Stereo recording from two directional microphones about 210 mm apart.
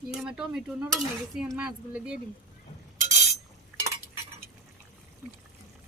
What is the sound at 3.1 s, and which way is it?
Chink, 35° right (ahead or behind).